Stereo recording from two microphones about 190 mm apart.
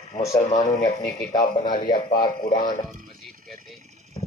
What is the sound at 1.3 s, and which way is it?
Speech, 20° left (ahead or behind).